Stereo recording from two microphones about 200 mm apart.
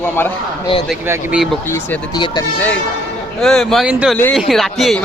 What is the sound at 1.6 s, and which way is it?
Speech, 10° left (ahead or behind).